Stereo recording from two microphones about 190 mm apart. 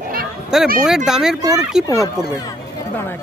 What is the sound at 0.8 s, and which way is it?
Speech, 5° right (ahead or behind).